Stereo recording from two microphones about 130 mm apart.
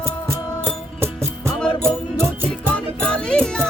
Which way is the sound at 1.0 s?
20° right (ahead or behind).